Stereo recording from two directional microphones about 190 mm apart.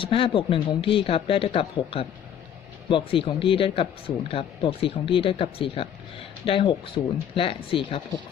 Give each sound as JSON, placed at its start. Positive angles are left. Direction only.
{"t": 0.0, "sound": "speech", "side_deg": 30}